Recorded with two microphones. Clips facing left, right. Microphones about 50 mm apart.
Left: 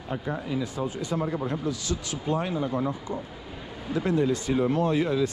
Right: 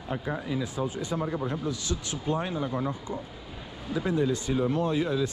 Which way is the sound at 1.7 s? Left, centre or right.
Right.